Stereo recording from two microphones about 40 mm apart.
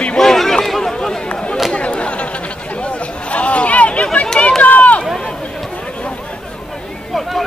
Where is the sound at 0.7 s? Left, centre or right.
Centre.